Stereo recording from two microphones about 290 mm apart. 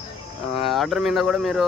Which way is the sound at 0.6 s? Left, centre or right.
Centre.